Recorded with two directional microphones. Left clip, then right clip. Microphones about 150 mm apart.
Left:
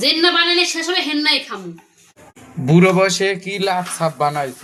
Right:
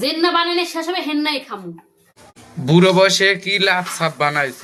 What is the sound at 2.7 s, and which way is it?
Speech, 5° left (ahead or behind).